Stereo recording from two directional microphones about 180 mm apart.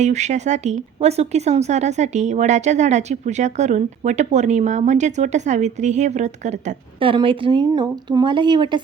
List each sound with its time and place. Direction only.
0.0 s speech: 40° right (ahead or behind)